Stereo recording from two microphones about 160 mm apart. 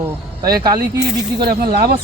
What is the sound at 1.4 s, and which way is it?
Speech, 65° right (ahead or behind).